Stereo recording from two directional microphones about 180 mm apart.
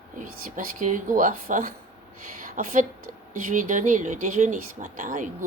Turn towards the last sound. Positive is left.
turn(degrees=-45)  # may be behind; listen again after turning